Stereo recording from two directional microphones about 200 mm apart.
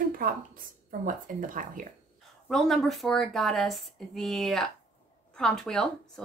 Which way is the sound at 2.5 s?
Centre (ahead or behind).